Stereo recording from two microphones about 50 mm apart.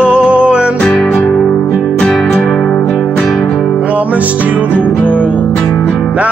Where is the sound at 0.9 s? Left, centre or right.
Centre.